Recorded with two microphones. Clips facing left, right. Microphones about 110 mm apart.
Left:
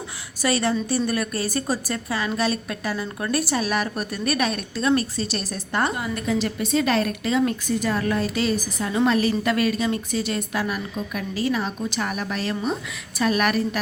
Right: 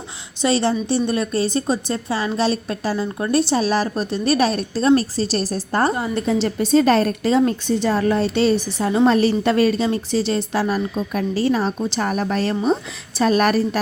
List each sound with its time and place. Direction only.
0.4 s a woman's voice: 30° right (ahead or behind)